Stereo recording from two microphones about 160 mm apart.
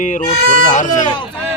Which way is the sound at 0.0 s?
50° left (ahead or behind).